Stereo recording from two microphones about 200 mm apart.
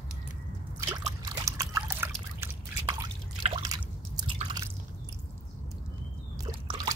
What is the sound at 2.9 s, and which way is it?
Drip, 25° right (ahead or behind).